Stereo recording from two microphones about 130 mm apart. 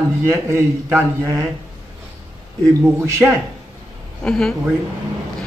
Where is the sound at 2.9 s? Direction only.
20° right (ahead or behind).